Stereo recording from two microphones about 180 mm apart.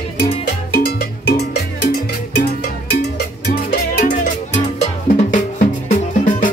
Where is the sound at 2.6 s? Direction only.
70° left (ahead or behind).